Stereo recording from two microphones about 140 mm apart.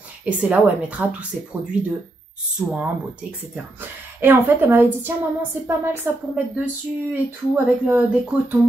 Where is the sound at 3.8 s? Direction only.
15° right (ahead or behind).